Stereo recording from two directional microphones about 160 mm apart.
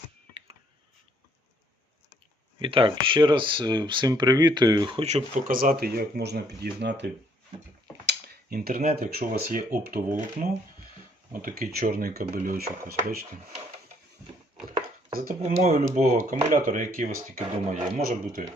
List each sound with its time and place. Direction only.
2.6 s speech: 35° right (ahead or behind)
5.0 s speech: 45° right (ahead or behind)
5.5 s speech: 70° right (ahead or behind); by 7.1 s 90° right
8.0 s a sound: 70° right (ahead or behind)
9.0 s speech: 70° right (ahead or behind)
11.3 s speech: 70° right (ahead or behind)
15.1 s speech: 65° right (ahead or behind)
15.4 s speech: 40° right (ahead or behind)
16.5 s speech: 50° right (ahead or behind)